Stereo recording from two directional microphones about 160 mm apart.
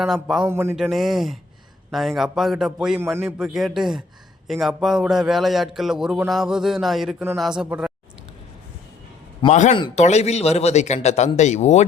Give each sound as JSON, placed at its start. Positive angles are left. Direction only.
{"t": 0.0, "sound": "a man's voice", "side_deg": -5}
{"t": 0.4, "sound": "a sound", "side_deg": -15}
{"t": 0.8, "sound": "a man's voice", "side_deg": 0}
{"t": 9.5, "sound": "speech", "side_deg": 45}